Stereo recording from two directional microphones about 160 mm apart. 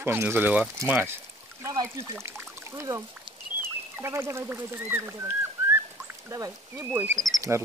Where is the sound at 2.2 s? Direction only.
15° right (ahead or behind).